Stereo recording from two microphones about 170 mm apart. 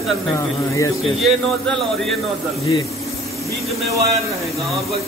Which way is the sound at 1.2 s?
Centre (ahead or behind).